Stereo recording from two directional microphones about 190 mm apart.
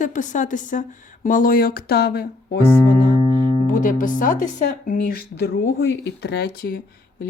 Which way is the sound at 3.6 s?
45° left (ahead or behind).